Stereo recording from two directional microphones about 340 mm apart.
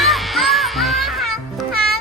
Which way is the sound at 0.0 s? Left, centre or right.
Centre.